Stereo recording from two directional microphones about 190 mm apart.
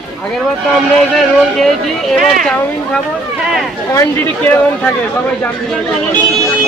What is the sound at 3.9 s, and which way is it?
Speech, 15° left (ahead or behind).